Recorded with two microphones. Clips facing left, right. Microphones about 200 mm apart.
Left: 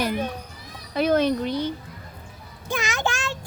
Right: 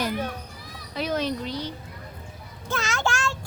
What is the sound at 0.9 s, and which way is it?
Speech, 55° left (ahead or behind).